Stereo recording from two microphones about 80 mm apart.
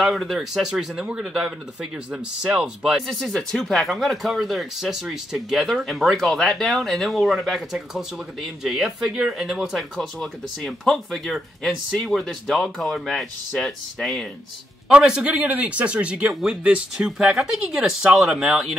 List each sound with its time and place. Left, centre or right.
0.0 s speech: centre
3.1 s speech: centre
14.9 s speech: centre